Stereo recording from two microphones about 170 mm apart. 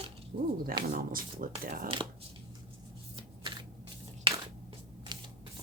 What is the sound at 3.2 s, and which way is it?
Shuffling cards, 25° right (ahead or behind).